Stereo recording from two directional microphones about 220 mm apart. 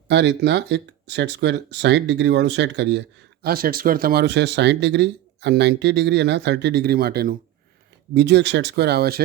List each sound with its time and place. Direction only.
0.1 s speech: 50° right (ahead or behind)
3.4 s speech: 40° right (ahead or behind)